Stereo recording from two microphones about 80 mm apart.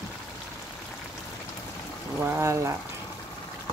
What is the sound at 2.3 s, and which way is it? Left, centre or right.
Speech, right.